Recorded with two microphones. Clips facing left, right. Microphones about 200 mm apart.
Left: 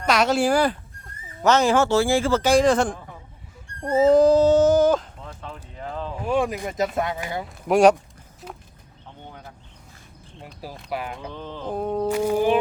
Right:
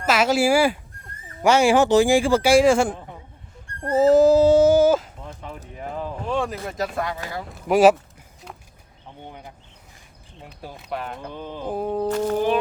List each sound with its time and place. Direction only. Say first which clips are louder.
0.0 s speech: right 1 dB; 5° right (ahead or behind)
3.9 s a sound: right 1 dB; 5° right (ahead or behind)
6.2 s speech: left 4 dB; 10° left (ahead or behind)
7.5 s speech: right 1 dB; centre (ahead or behind)
10.4 s speech: left 1 dB; 5° left (ahead or behind)
11.3 s speech: right 3 dB; 10° right (ahead or behind)
12.0 s music: left 2 dB; 10° left (ahead or behind)